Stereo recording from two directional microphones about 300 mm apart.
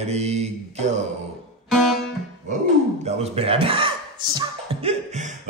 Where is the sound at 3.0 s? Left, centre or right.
Right.